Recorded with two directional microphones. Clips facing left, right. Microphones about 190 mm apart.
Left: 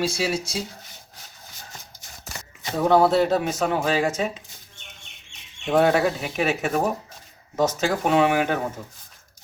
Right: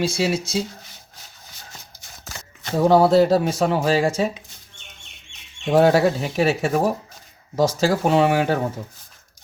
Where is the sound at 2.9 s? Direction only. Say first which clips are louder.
Right 3 dB; 35° right (ahead or behind).